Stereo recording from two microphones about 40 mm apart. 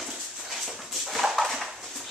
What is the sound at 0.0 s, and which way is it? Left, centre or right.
Dog, centre.